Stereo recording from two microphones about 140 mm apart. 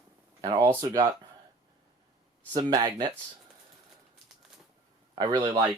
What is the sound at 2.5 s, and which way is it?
Speech, 30° right (ahead or behind).